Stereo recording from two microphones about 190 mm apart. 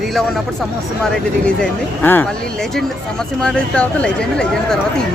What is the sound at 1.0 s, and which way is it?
Speech, 5° left (ahead or behind).